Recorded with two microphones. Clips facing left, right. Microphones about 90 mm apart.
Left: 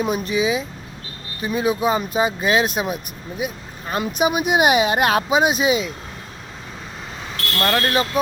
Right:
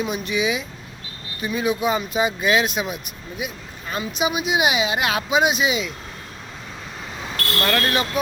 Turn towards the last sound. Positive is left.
turn(degrees=20)  # may be behind; listen again after turning